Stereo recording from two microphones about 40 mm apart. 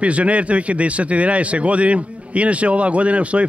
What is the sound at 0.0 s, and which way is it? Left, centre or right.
A man's voice, right.